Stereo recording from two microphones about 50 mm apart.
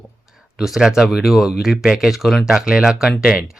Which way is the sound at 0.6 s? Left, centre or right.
Centre.